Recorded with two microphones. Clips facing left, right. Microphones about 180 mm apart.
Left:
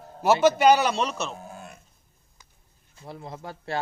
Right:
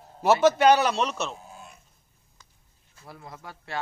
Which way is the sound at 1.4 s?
60° left (ahead or behind).